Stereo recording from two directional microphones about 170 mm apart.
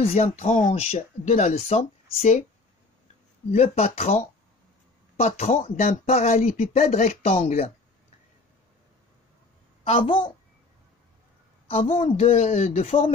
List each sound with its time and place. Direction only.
0.0 s speech: 35° left (ahead or behind)
3.5 s speech: 40° left (ahead or behind)
5.4 s speech: 40° left (ahead or behind)
6.9 s speech: 40° left (ahead or behind)
9.8 s speech: 30° left (ahead or behind)
11.6 s speech: 35° left (ahead or behind)